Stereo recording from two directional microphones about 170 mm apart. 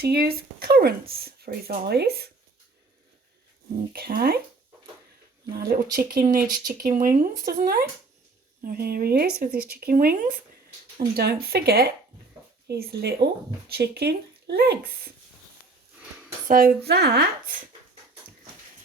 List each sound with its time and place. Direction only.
0.0 s speech: 65° right (ahead or behind)
3.9 s speech: 60° right (ahead or behind)
5.5 s speech: 60° right (ahead or behind)
11.2 s speech: 70° right (ahead or behind)
16.5 s speech: 60° right (ahead or behind)